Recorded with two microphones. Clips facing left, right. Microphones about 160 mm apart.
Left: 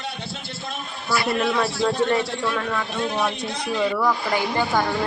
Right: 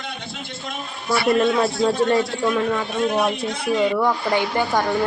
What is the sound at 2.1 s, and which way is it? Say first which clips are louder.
A man's voice: right 3 dB; 25° right (ahead or behind).